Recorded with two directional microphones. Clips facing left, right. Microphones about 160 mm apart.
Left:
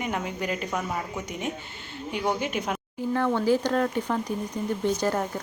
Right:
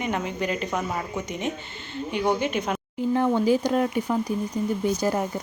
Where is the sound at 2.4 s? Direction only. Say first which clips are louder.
Right 3 dB; 10° left (ahead or behind).